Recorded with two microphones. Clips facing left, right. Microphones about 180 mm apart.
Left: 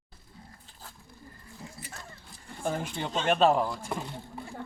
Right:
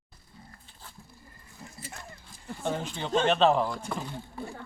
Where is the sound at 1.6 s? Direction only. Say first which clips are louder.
Left 2 dB; 10° left (ahead or behind).